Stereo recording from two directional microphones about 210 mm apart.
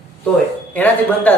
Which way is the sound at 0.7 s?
10° left (ahead or behind).